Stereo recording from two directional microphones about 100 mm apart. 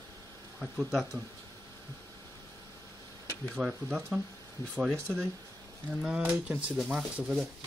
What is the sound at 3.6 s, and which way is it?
Speech, 5° right (ahead or behind).